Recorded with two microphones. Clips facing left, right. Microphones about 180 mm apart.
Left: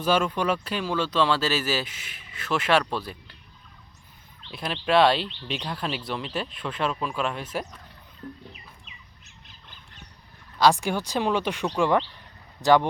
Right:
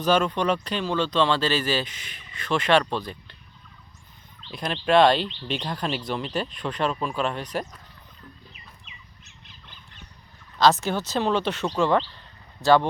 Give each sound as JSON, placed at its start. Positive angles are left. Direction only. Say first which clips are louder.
{"t": 0.0, "sound": "speech", "louder": "right 2 dB", "side_deg": 5}
{"t": 4.5, "sound": "speech", "louder": "right 2 dB", "side_deg": 5}
{"t": 8.2, "sound": "a sound", "louder": "left 10 dB", "side_deg": 35}
{"t": 10.6, "sound": "speech", "louder": "right 1 dB", "side_deg": 10}